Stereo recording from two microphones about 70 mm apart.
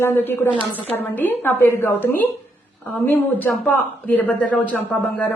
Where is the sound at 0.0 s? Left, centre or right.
Left.